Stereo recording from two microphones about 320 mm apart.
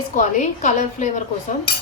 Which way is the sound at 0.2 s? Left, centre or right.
Left.